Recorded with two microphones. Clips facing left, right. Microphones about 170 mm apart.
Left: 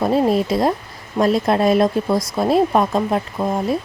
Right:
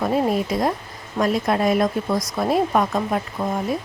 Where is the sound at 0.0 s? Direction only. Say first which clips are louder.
Left 4 dB; 25° left (ahead or behind).